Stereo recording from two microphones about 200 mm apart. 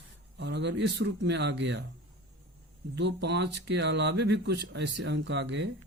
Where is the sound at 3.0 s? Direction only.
60° right (ahead or behind).